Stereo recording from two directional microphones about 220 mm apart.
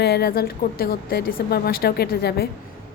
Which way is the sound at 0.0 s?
50° left (ahead or behind).